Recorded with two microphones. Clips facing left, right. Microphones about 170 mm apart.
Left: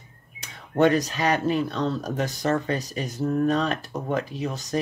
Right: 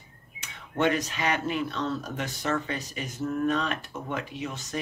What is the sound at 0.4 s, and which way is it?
Speech, 40° left (ahead or behind).